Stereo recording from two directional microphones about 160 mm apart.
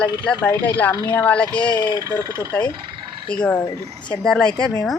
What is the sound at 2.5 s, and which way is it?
Speech, 10° left (ahead or behind).